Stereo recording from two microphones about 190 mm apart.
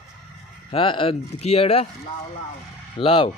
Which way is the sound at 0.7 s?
25° left (ahead or behind).